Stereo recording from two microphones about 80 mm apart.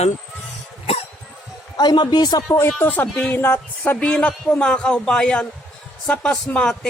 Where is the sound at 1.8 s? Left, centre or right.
Left.